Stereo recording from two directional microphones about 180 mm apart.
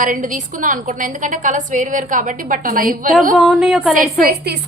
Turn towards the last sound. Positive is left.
turn(degrees=-60)  # may be behind; listen again after turning